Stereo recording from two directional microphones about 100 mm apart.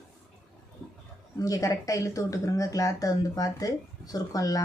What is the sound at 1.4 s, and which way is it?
Speech, 35° left (ahead or behind).